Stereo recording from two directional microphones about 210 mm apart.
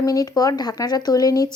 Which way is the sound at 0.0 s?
15° left (ahead or behind).